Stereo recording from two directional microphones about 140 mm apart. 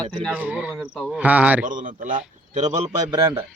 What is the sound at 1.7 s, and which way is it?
A man's voice, 70° right (ahead or behind).